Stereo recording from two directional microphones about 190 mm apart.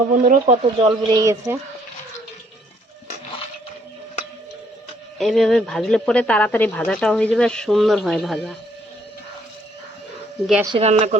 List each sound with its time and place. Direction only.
0.1 s speech: 40° right (ahead or behind)
0.8 s speech: 25° right (ahead or behind)
5.1 s speech: centre (ahead or behind)
10.8 s speech: 35° right (ahead or behind)